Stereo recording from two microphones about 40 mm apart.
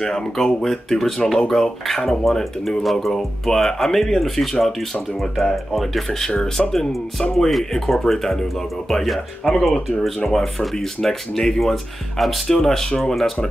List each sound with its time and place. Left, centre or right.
0.0 s speech: centre
6.0 s speech: centre
10.1 s speech: centre
12.4 s speech: centre